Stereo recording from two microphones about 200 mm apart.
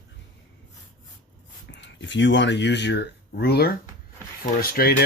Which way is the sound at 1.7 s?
65° left (ahead or behind).